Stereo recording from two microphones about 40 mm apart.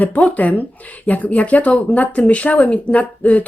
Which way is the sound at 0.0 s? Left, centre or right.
Left.